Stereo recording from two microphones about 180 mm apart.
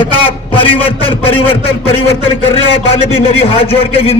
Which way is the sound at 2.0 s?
35° left (ahead or behind).